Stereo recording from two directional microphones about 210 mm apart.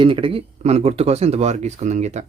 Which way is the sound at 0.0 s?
25° right (ahead or behind).